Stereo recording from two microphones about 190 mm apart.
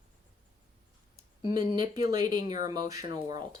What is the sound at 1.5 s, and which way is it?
Speech, 20° right (ahead or behind).